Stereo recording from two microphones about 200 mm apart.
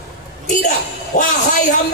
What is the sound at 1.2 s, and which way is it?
Speech, 40° left (ahead or behind).